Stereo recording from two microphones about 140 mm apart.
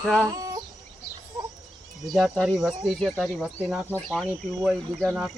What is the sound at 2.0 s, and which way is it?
Speech, centre (ahead or behind).